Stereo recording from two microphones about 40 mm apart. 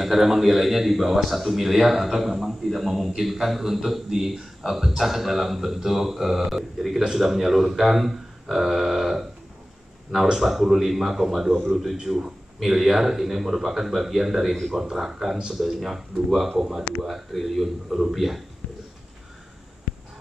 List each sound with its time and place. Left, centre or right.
0.0 s a man's voice: centre
10.4 s a man's voice: centre
15.6 s a man's voice: centre